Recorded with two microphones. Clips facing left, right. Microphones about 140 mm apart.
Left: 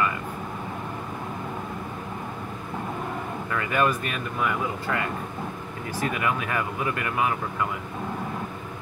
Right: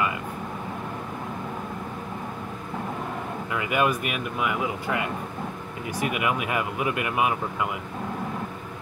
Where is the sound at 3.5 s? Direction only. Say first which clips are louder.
Even; 15° right (ahead or behind).